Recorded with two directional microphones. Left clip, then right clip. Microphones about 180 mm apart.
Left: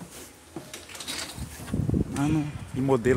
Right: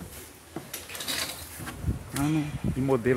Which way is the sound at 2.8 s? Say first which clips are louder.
Left 2 dB; 25° left (ahead or behind).